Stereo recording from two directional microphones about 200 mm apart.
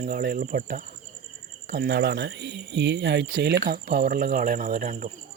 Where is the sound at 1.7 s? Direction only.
55° right (ahead or behind).